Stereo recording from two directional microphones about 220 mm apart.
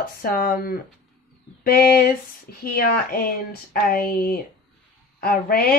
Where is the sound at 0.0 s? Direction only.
40° left (ahead or behind).